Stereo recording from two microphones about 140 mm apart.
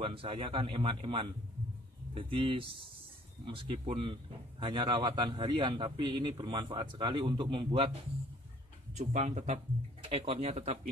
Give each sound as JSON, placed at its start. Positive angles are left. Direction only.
{"t": 0.0, "sound": "a man's voice", "side_deg": -40}
{"t": 8.9, "sound": "speech", "side_deg": -55}
{"t": 10.0, "sound": "speech", "side_deg": -40}